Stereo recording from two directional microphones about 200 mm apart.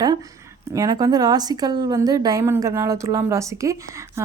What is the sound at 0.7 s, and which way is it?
Speech, 15° right (ahead or behind).